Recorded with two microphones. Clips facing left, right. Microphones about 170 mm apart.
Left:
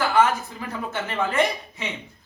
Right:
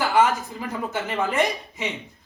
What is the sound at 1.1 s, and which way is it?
Speech, 15° right (ahead or behind).